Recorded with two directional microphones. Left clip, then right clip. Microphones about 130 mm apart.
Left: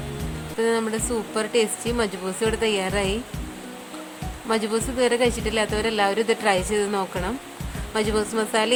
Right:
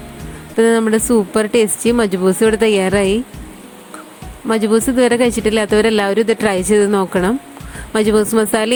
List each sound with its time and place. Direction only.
0.5 s speech: 60° right (ahead or behind)
4.4 s speech: 55° right (ahead or behind)